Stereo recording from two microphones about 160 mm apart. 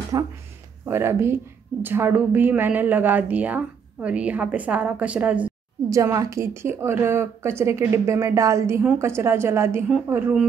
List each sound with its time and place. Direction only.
0.1 s speech: 25° right (ahead or behind)
5.9 s speech: 20° right (ahead or behind)